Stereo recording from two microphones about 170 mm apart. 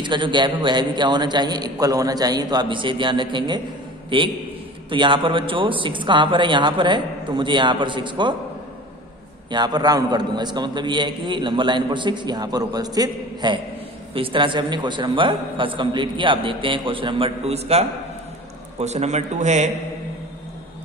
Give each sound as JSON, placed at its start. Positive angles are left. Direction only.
{"t": 0.0, "sound": "a man's voice", "side_deg": -30}
{"t": 4.8, "sound": "a man's voice", "side_deg": -30}
{"t": 9.5, "sound": "a man's voice", "side_deg": -25}